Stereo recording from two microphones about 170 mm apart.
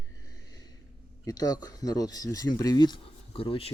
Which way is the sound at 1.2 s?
20° left (ahead or behind).